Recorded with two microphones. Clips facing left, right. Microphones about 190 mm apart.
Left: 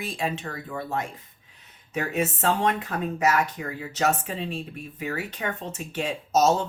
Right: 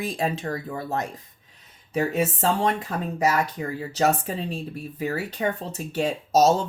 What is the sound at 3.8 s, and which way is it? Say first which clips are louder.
Speech: right 2 dB; 35° right (ahead or behind).